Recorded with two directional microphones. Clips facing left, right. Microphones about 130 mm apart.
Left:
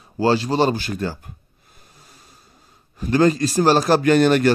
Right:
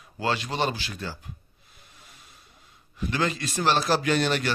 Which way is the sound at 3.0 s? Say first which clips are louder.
Left 11 dB; 40° left (ahead or behind).